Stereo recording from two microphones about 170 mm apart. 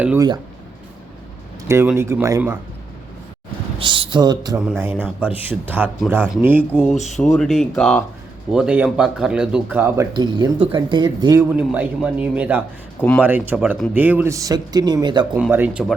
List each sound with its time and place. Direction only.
1.6 s speech: 15° right (ahead or behind)
3.8 s speech: 30° right (ahead or behind)
4.6 s speech: 10° right (ahead or behind)
7.2 s speech: centre (ahead or behind)
8.5 s speech: 10° right (ahead or behind)
10.2 s speech: 25° right (ahead or behind)
11.5 s speech: 10° right (ahead or behind); by 15.3 s 25° right (ahead or behind)
15.4 s speech: 5° right (ahead or behind)